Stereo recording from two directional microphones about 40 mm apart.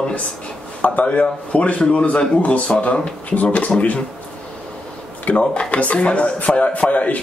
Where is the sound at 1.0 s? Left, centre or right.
Left.